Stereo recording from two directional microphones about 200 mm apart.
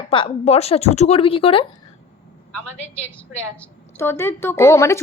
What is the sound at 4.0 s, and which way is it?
A woman's voice, 10° left (ahead or behind).